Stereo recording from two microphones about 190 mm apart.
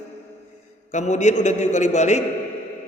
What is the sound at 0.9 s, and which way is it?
A man's voice, 40° left (ahead or behind).